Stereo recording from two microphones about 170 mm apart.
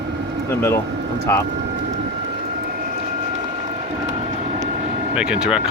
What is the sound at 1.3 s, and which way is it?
Speech, 15° left (ahead or behind).